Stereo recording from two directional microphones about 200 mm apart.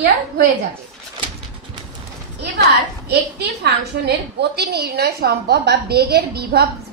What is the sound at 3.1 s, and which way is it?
A woman's voice, 55° right (ahead or behind).